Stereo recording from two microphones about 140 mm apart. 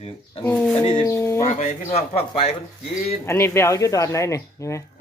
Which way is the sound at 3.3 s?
20° left (ahead or behind).